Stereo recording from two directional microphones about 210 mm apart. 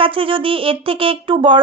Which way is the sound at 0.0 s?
25° right (ahead or behind).